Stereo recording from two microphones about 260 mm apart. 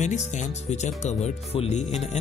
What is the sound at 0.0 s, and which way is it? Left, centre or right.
Speech, left.